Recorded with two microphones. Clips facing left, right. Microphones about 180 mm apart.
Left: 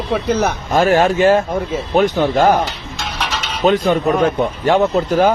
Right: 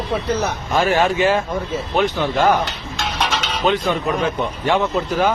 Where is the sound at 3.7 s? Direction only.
40° left (ahead or behind).